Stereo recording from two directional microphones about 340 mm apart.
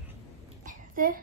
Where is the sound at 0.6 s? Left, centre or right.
Right.